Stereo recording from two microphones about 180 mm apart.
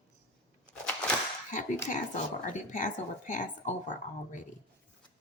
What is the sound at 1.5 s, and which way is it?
A woman's voice, 45° left (ahead or behind).